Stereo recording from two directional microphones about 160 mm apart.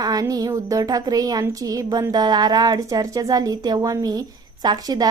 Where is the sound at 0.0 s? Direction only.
25° right (ahead or behind).